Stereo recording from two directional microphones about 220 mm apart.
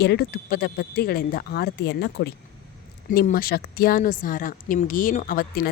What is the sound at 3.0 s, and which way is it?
A woman's voice, 40° left (ahead or behind).